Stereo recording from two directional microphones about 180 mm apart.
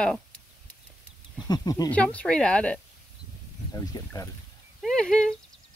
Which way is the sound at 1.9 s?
5° left (ahead or behind).